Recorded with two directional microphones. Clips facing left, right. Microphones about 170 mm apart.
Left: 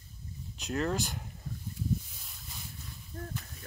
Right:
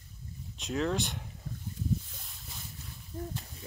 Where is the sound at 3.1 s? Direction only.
5° right (ahead or behind).